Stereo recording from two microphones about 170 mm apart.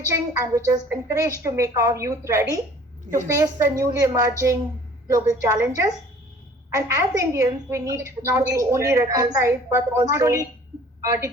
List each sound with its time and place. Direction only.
0.0 s a woman's voice: 20° right (ahead or behind)